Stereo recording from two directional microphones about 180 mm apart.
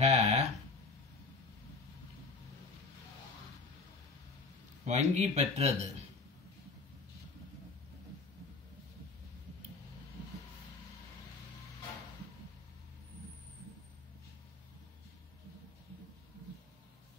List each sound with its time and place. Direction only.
0.0 s speech: 40° right (ahead or behind)
4.8 s speech: 40° right (ahead or behind)